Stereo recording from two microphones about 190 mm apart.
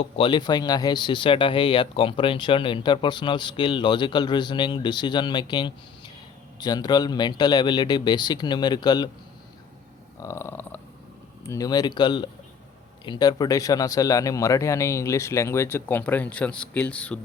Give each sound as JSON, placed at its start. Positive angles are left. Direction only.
{"t": 0.0, "sound": "speech", "side_deg": 25}
{"t": 10.2, "sound": "a sound", "side_deg": 15}
{"t": 11.4, "sound": "speech", "side_deg": 20}